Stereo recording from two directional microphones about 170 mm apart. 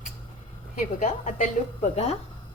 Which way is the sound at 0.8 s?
45° left (ahead or behind).